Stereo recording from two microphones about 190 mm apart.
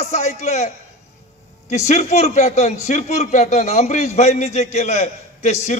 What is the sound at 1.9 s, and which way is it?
A man's voice, 35° left (ahead or behind).